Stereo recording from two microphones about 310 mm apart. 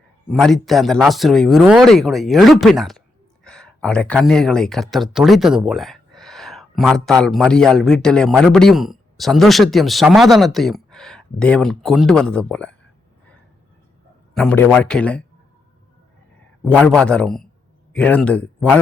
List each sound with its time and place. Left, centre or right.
0.3 s speech: centre
14.3 s speech: centre
16.6 s speech: centre